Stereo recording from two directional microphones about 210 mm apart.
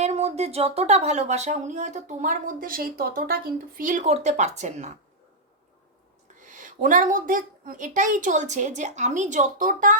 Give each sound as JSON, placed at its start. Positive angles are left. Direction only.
{"t": 0.0, "sound": "a woman's voice", "side_deg": -30}
{"t": 6.4, "sound": "a woman's voice", "side_deg": -40}